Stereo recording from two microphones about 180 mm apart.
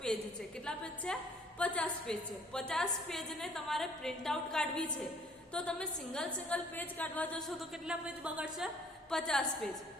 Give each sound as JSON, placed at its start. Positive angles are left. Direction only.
{"t": 0.6, "sound": "a woman's voice", "side_deg": 5}